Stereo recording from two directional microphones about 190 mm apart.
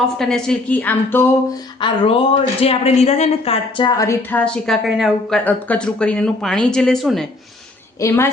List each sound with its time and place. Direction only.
0.2 s speech: 5° left (ahead or behind)
1.8 s speech: 30° left (ahead or behind); by 7.3 s centre (ahead or behind)
7.9 s speech: 15° left (ahead or behind)